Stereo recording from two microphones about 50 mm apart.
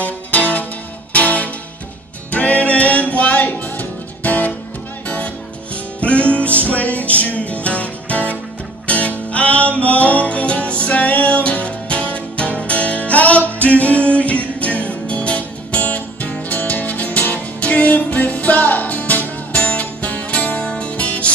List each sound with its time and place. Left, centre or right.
0.0 s music: left